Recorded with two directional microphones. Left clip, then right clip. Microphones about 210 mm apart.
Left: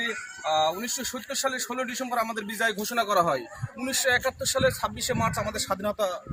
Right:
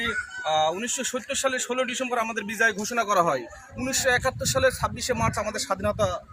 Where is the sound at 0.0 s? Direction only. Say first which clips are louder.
Right 3 dB; 35° right (ahead or behind).